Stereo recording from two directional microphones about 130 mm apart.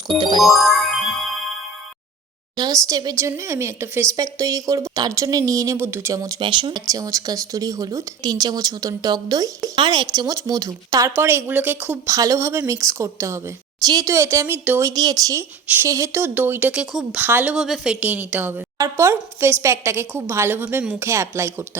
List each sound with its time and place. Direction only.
0.2 s music: 35° right (ahead or behind)
0.4 s music: centre (ahead or behind)
2.6 s speech: 25° right (ahead or behind)
6.4 s speech: 40° right (ahead or behind)
6.8 s speech: 25° right (ahead or behind)
9.7 s speech: 40° right (ahead or behind)
11.2 s a woman's voice: 15° right (ahead or behind)
12.0 s speech: 25° right (ahead or behind)
14.8 s a woman's voice: 25° right (ahead or behind)
16.8 s speech: 5° right (ahead or behind)
17.2 s a woman's voice: 15° right (ahead or behind)
17.5 s a woman's voice: 5° right (ahead or behind); by 21.5 s 20° right (ahead or behind)